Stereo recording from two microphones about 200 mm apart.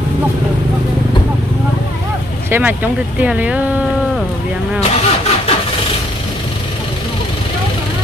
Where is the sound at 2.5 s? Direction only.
10° right (ahead or behind).